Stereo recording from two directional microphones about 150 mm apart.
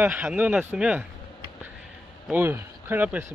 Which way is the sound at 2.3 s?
15° right (ahead or behind).